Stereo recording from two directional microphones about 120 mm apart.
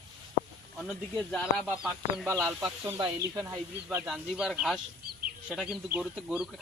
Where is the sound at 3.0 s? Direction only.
30° right (ahead or behind).